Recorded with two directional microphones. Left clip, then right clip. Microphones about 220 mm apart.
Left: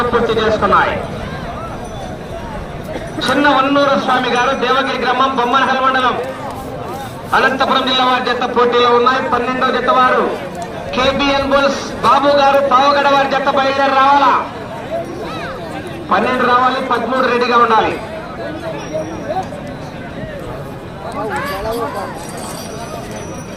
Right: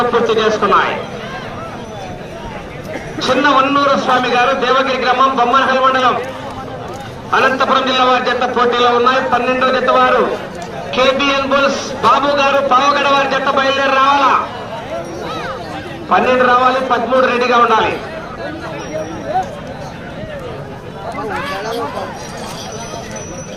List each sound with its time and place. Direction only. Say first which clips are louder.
0.1 s a man's voice: right 1 dB; 30° right (ahead or behind)
3.2 s a man's voice: right 1 dB; 30° right (ahead or behind)
7.3 s a man's voice: right 1 dB; 30° right (ahead or behind)
16.0 s a man's voice: right 2 dB; 30° right (ahead or behind)